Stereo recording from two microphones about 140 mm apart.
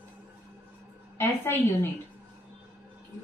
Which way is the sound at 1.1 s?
15° left (ahead or behind).